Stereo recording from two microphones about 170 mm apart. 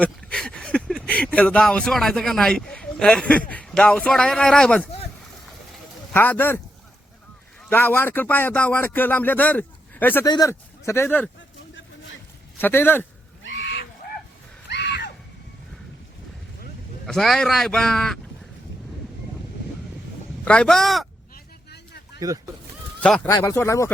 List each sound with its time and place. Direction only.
0.0 s speech: 5° left (ahead or behind)
6.1 s speech: 10° left (ahead or behind)
7.7 s speech: 10° left (ahead or behind)
10.2 s speech: 20° left (ahead or behind)
12.5 s speech: 10° left (ahead or behind)
13.4 s goose: 90° left
14.7 s a sound: 90° left
17.1 s speech: 5° left (ahead or behind)
20.4 s speech: 5° left (ahead or behind)
21.3 s a sound: 75° left (ahead or behind)
23.0 s speech: 5° left (ahead or behind)
23.2 s speech: 15° left (ahead or behind)